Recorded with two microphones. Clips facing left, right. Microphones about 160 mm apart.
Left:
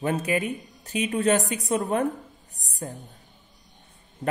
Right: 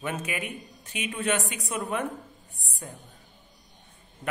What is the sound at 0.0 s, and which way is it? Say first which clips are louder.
Speech: left 7 dB; 35° left (ahead or behind).